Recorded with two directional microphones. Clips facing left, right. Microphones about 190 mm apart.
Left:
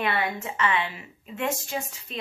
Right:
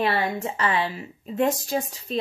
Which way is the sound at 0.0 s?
35° right (ahead or behind).